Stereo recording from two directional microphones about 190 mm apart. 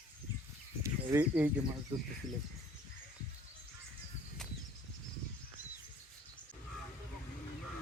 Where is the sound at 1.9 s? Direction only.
30° right (ahead or behind).